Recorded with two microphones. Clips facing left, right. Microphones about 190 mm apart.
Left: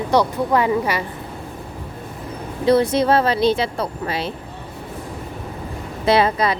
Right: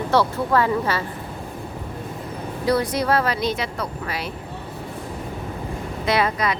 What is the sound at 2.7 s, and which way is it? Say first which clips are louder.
Speech: left 5 dB; 25° left (ahead or behind).